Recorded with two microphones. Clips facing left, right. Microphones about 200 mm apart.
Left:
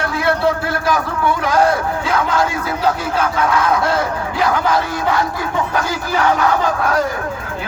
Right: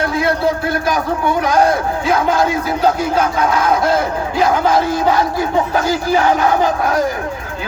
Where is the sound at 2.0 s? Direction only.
25° right (ahead or behind).